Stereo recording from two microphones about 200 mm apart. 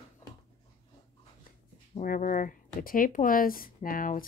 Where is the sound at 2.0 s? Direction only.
45° left (ahead or behind).